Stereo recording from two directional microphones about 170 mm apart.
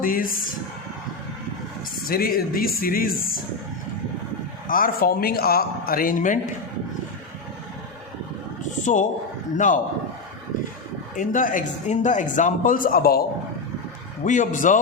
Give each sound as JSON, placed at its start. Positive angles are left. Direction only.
{"t": 0.0, "sound": "speech", "side_deg": 55}
{"t": 2.0, "sound": "speech", "side_deg": 60}
{"t": 4.7, "sound": "speech", "side_deg": 60}
{"t": 8.8, "sound": "a man's voice", "side_deg": 45}
{"t": 11.2, "sound": "a man's voice", "side_deg": 50}
{"t": 14.3, "sound": "a man's voice", "side_deg": 50}